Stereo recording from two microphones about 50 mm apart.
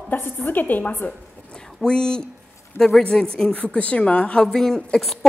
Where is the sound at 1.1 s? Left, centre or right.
Centre.